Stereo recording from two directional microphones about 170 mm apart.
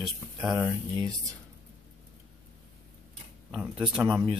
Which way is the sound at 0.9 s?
20° right (ahead or behind).